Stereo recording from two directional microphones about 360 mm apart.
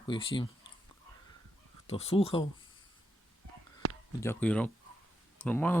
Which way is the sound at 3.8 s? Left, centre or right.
Right.